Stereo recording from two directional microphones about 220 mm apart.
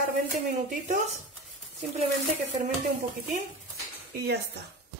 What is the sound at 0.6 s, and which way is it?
Speech, 35° right (ahead or behind).